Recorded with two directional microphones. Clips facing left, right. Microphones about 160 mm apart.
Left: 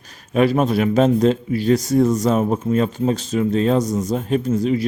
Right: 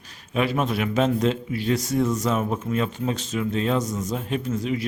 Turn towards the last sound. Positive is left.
turn(degrees=35)  # may be behind; listen again after turning